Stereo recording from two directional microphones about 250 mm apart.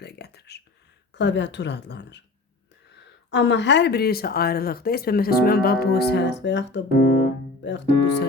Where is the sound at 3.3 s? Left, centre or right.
Left.